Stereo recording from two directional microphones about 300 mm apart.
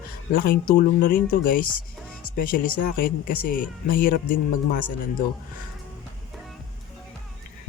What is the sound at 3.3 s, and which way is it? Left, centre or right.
Speech, left.